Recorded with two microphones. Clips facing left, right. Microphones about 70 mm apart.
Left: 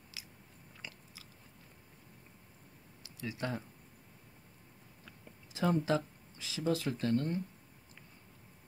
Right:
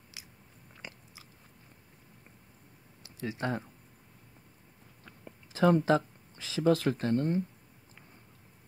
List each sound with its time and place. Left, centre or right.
0.1 s biting: right
3.2 s speech: right
5.2 s a sound: right
6.6 s speech: right
7.0 s speech: right